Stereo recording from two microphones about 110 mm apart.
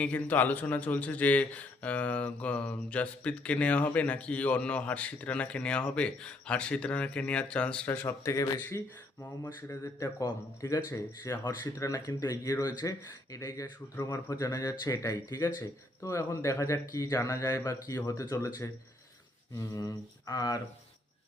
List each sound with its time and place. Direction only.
0.0 s a man's voice: 15° left (ahead or behind); by 20.6 s 35° left (ahead or behind)